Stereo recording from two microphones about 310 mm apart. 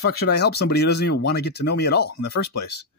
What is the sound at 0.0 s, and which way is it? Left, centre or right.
A man's voice, left.